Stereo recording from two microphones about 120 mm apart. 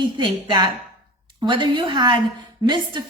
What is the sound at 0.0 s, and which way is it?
A woman's voice, 40° right (ahead or behind).